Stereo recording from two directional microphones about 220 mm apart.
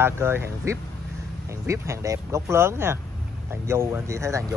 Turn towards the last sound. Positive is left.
turn(degrees=-15)  # may be behind; listen again after turning